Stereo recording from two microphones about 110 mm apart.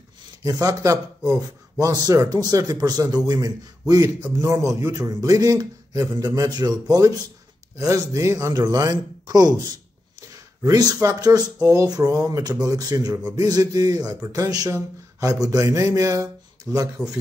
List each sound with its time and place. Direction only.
0.4 s speech: 35° right (ahead or behind)